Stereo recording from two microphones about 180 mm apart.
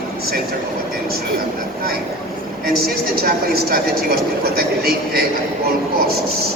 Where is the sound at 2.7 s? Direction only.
55° right (ahead or behind).